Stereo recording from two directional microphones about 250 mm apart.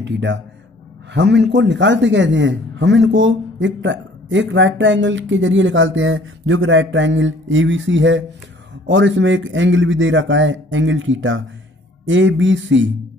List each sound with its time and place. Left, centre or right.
0.0 s a man's voice: right